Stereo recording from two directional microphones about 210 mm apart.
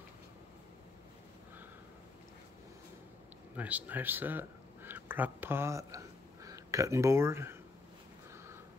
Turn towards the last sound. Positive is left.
turn(degrees=-10)  # may be behind; listen again after turning